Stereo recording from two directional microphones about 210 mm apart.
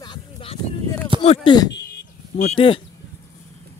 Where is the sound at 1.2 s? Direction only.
25° left (ahead or behind).